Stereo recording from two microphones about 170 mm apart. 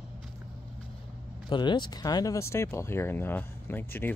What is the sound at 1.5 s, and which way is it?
Speech, 25° left (ahead or behind).